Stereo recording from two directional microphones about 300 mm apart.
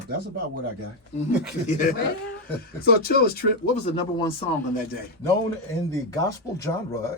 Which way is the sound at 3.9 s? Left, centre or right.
Centre.